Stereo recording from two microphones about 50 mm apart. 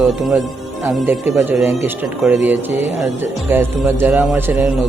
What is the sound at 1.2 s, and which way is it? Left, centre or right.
Speech, right.